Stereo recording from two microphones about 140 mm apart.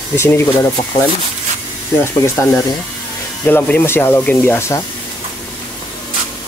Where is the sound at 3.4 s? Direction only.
15° left (ahead or behind).